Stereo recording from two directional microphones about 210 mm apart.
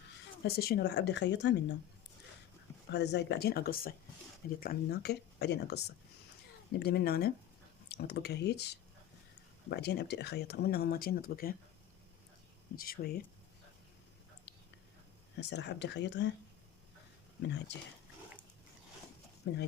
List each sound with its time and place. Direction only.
0.4 s speech: 50° left (ahead or behind)
2.9 s speech: 55° left (ahead or behind)
12.7 s speech: 45° left (ahead or behind)
15.4 s speech: 55° left (ahead or behind)
19.4 s speech: 55° left (ahead or behind)